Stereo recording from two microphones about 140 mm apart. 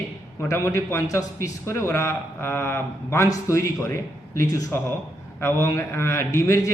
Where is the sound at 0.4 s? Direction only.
20° left (ahead or behind).